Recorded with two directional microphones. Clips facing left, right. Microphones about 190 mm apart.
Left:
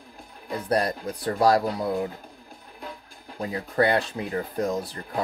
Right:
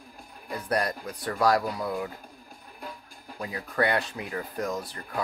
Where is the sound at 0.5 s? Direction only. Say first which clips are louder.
Left 4 dB; 30° left (ahead or behind).